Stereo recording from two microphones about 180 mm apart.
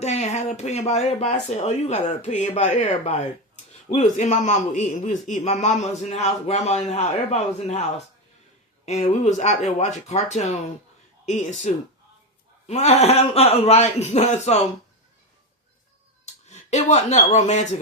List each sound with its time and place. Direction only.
0.0 s speech: 40° left (ahead or behind)
16.2 s speech: 40° left (ahead or behind)